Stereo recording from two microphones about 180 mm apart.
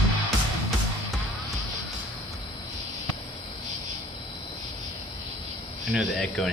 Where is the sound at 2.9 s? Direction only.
40° left (ahead or behind).